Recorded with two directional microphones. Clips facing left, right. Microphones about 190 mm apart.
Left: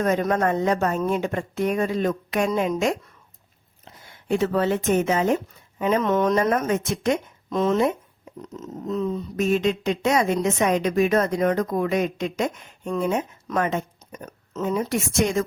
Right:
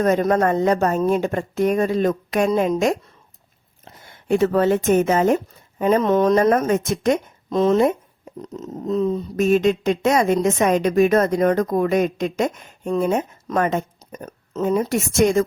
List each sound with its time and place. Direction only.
0.0 s a woman's voice: 40° right (ahead or behind)